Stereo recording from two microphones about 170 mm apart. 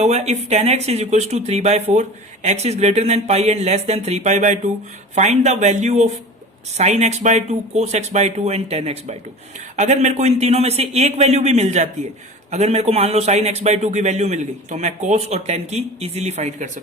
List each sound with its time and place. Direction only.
0.0 s speech: 40° right (ahead or behind)